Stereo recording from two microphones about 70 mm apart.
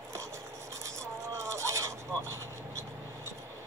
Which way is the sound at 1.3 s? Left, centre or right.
Right.